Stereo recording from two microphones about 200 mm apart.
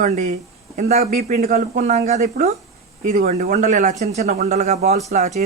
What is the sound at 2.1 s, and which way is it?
A man's voice, 35° right (ahead or behind).